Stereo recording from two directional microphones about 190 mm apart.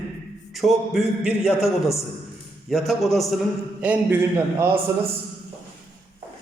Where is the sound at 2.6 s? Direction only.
Centre (ahead or behind).